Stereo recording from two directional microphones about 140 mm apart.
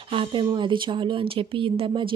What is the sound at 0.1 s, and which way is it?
Speech, 35° right (ahead or behind).